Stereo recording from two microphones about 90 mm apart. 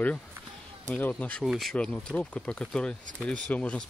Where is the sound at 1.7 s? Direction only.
15° left (ahead or behind).